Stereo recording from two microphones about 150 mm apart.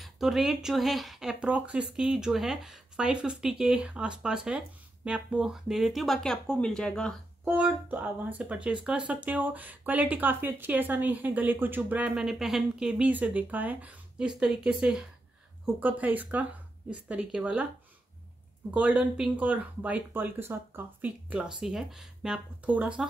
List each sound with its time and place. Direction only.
0.0 s speech: centre (ahead or behind)
7.4 s speech: 10° right (ahead or behind)
18.7 s speech: 10° right (ahead or behind)